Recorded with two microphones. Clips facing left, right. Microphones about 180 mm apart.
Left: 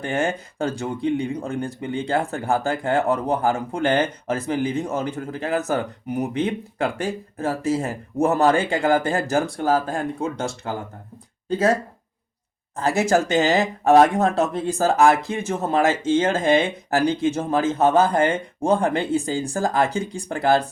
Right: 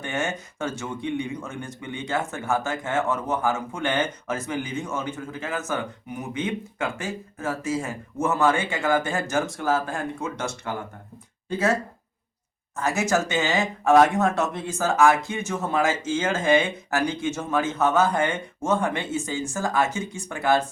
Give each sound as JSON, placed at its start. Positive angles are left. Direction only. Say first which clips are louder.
{"t": 0.0, "sound": "speech", "louder": "left 5 dB", "side_deg": 35}
{"t": 12.7, "sound": "speech", "louder": "left 4 dB", "side_deg": 30}